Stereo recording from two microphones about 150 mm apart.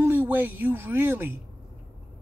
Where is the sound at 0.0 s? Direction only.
10° right (ahead or behind).